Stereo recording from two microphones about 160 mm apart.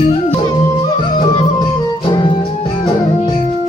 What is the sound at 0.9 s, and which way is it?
Music, 30° left (ahead or behind).